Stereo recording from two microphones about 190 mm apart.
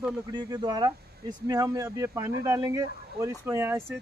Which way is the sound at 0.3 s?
20° right (ahead or behind).